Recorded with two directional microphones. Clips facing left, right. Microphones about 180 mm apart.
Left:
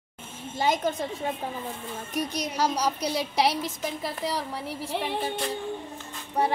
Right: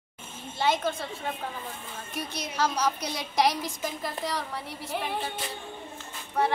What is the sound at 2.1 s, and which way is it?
Speech, 40° left (ahead or behind).